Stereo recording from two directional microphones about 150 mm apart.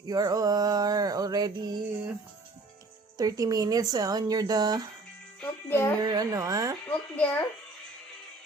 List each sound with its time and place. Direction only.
0.0 s mantra: 25° right (ahead or behind)
3.2 s speech: 25° right (ahead or behind)
5.4 s jingle bell: 15° left (ahead or behind)
6.0 s speech: 25° right (ahead or behind)
6.8 s a woman's voice: 10° left (ahead or behind)